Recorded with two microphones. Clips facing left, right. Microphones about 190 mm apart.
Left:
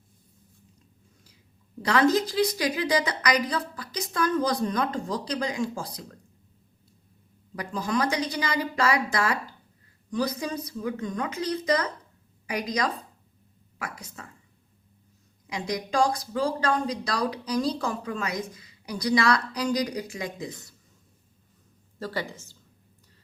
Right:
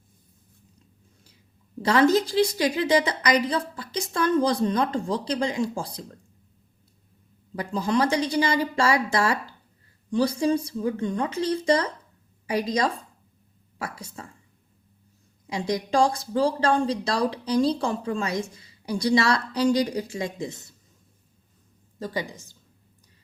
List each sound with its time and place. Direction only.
1.8 s speech: 25° right (ahead or behind)
7.5 s speech: 25° right (ahead or behind)
15.4 s speech: 30° right (ahead or behind)
21.9 s speech: 15° right (ahead or behind)